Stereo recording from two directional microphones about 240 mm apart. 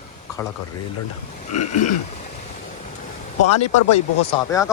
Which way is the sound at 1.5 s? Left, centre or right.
Left.